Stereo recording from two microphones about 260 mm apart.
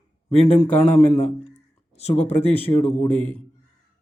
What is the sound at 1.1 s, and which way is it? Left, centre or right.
A man's voice, left.